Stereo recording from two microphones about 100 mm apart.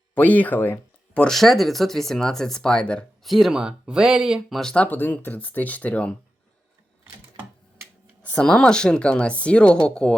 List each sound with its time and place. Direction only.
0.1 s speech: 15° left (ahead or behind)
1.2 s speech: centre (ahead or behind)
3.2 s speech: centre (ahead or behind)
4.7 s speech: 15° left (ahead or behind)
8.2 s speech: 10° left (ahead or behind)